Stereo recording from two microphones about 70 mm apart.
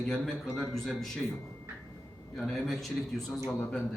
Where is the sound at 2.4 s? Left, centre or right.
Centre.